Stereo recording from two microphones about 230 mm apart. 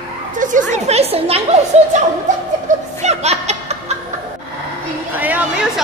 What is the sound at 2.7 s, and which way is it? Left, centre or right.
Children playing, right.